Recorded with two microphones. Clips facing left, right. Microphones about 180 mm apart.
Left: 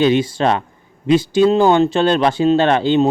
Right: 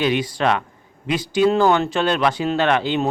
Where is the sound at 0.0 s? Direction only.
25° left (ahead or behind).